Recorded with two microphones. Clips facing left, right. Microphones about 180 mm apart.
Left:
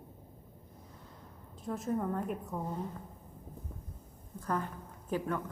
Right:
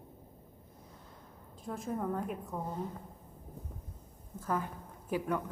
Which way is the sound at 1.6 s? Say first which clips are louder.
Left 2 dB; centre (ahead or behind).